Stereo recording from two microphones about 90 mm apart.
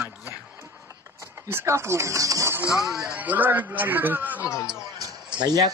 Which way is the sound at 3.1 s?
20° right (ahead or behind).